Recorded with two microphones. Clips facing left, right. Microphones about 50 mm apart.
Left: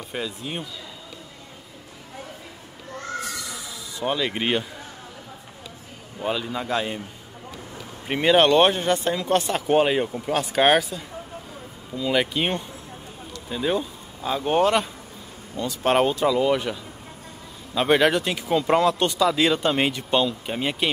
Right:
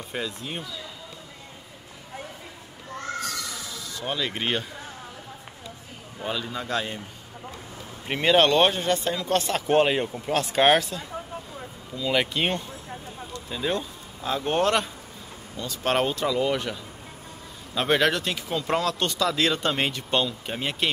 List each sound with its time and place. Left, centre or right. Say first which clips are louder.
0.1 s speech: left 2 dB; centre
4.0 s speech: left 4 dB; centre
6.2 s speech: left 4 dB; centre
8.1 s speech: left 2 dB; centre
9.5 s speech: right 1 dB; centre
12.1 s speech: left 2 dB; centre
13.5 s speech: left 4 dB; centre
15.5 s speech: left 5 dB; left
15.9 s speech: left 4 dB; centre
17.7 s speech: left 3 dB; centre